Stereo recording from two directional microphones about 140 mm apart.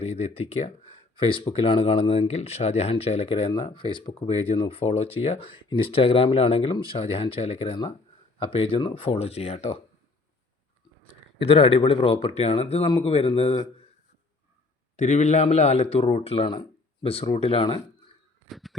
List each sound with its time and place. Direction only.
0.0 s speech: 45° left (ahead or behind)
11.3 s speech: 40° left (ahead or behind)
14.9 s speech: 55° left (ahead or behind); by 17.7 s 40° left (ahead or behind)
18.4 s a sound: centre (ahead or behind)